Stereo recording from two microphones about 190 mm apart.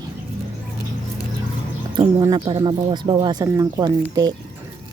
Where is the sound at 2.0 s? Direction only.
20° right (ahead or behind).